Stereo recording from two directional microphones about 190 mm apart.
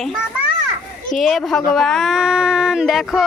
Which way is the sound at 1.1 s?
Centre (ahead or behind).